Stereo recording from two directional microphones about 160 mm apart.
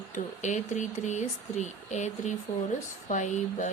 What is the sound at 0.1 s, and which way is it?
Speech, 50° left (ahead or behind).